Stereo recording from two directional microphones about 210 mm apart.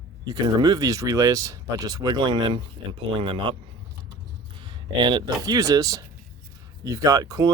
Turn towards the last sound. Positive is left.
turn(degrees=-15)  # may be behind; listen again after turning